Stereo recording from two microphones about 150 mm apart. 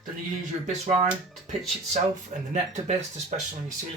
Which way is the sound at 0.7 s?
50° right (ahead or behind).